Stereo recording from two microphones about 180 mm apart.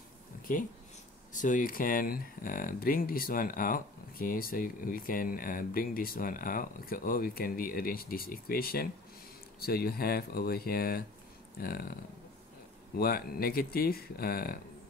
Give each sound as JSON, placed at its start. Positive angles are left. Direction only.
{"t": 0.5, "sound": "speech", "side_deg": 45}
{"t": 12.9, "sound": "speech", "side_deg": 55}